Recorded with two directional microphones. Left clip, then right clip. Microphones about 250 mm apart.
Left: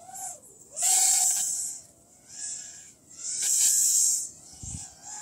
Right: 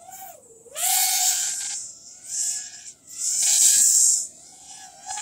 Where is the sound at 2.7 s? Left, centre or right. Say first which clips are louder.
Right 7 dB; right.